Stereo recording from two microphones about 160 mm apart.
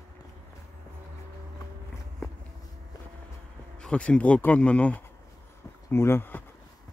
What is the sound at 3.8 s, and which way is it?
Speech, 5° left (ahead or behind).